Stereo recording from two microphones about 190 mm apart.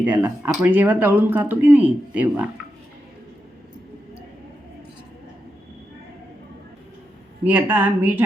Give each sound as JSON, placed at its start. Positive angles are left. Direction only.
{"t": 0.0, "sound": "speech", "side_deg": -5}
{"t": 7.4, "sound": "speech", "side_deg": -10}